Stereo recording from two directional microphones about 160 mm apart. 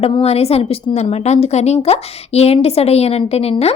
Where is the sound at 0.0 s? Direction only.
35° left (ahead or behind).